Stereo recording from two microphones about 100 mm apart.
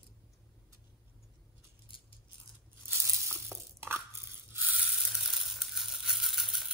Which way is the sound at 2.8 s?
25° right (ahead or behind).